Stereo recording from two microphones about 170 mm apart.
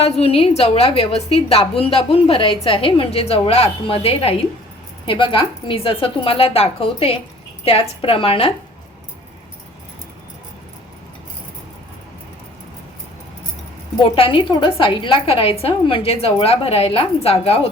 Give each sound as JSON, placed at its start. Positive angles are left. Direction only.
{"t": 0.0, "sound": "a woman's voice", "side_deg": 35}
{"t": 14.2, "sound": "a woman's voice", "side_deg": 30}